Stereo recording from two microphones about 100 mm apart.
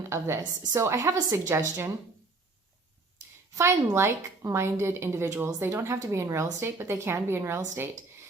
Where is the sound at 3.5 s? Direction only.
30° right (ahead or behind).